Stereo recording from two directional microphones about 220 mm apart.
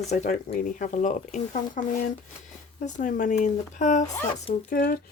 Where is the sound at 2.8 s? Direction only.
35° left (ahead or behind).